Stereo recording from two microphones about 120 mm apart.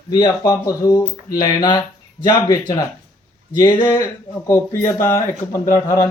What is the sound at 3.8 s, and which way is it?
Speech, 25° left (ahead or behind).